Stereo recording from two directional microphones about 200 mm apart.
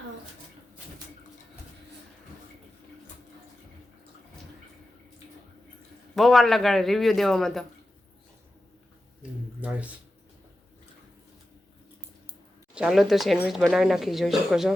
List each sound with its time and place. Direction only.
6.1 s speech: centre (ahead or behind)
9.6 s speech: 5° right (ahead or behind)
12.7 s speech: 5° right (ahead or behind)